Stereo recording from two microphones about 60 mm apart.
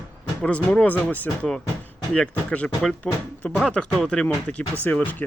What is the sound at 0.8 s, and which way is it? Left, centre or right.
Speech, left.